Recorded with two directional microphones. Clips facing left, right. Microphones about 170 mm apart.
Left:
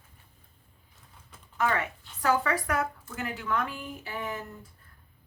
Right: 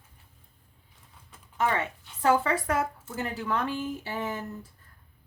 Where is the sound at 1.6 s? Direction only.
25° right (ahead or behind).